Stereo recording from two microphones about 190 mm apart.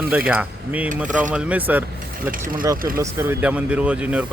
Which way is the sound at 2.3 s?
45° right (ahead or behind).